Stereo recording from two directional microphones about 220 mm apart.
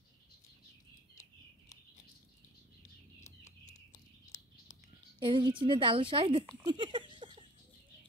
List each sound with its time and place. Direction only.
3.3 s bird: 30° left (ahead or behind)
5.2 s a woman's voice: 20° right (ahead or behind)
6.7 s a sound: 20° right (ahead or behind)